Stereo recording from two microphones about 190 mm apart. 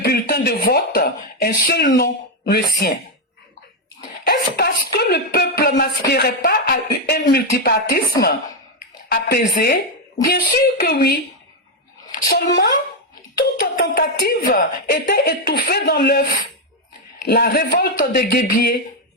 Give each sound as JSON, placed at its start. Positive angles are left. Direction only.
{"t": 0.0, "sound": "speech", "side_deg": 55}
{"t": 4.3, "sound": "speech", "side_deg": 55}
{"t": 8.2, "sound": "a woman's voice", "side_deg": 20}
{"t": 9.0, "sound": "a woman's voice", "side_deg": 55}
{"t": 17.2, "sound": "speech", "side_deg": 55}